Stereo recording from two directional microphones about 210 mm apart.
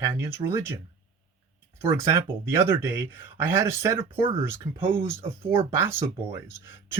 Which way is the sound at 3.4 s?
10° right (ahead or behind).